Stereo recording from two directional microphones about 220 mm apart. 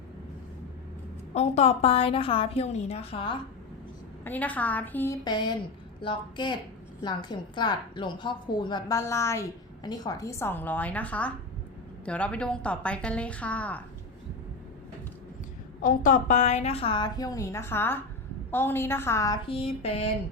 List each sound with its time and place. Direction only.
1.3 s a woman's voice: 30° left (ahead or behind)
4.2 s a woman's voice: 10° left (ahead or behind)
15.8 s a woman's voice: 35° left (ahead or behind)